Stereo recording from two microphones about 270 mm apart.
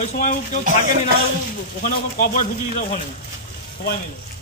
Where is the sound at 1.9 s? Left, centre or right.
Left.